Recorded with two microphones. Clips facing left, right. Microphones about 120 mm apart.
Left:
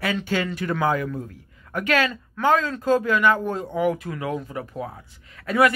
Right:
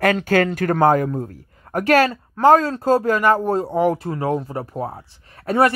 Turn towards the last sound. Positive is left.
turn(degrees=-35)  # may be behind; listen again after turning